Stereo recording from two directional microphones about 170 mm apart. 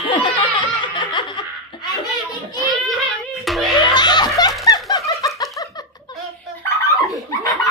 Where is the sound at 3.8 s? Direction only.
25° left (ahead or behind).